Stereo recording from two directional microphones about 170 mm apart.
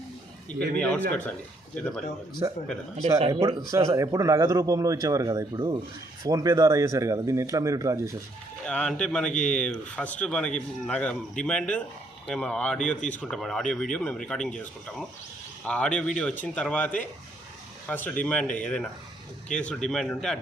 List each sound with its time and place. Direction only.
0.8 s speech: 5° left (ahead or behind)
2.4 s speech: 20° right (ahead or behind)
3.2 s speech: 40° right (ahead or behind)
3.7 s speech: 20° right (ahead or behind)
8.6 s speech: 5° left (ahead or behind)